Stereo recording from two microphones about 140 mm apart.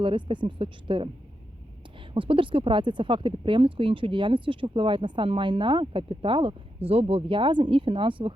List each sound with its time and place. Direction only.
0.0 s speech: 35° right (ahead or behind)
2.1 s speech: 40° right (ahead or behind)